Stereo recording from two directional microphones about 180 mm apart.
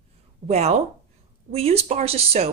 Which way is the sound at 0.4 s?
35° right (ahead or behind).